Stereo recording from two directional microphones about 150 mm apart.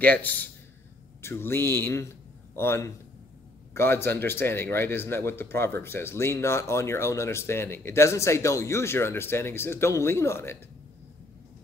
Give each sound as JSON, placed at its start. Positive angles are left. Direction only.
{"t": 0.0, "sound": "speech", "side_deg": 10}